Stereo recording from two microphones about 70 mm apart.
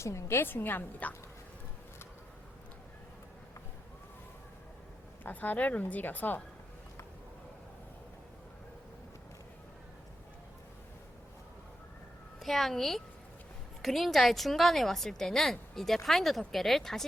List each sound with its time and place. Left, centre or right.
0.0 s a woman's voice: left
5.2 s a woman's voice: left
12.4 s a woman's voice: centre